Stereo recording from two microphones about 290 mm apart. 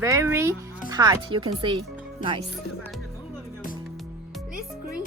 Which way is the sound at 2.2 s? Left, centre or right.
Left.